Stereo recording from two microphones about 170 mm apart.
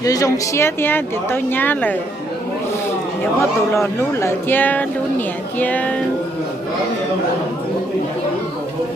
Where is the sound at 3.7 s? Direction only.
15° left (ahead or behind).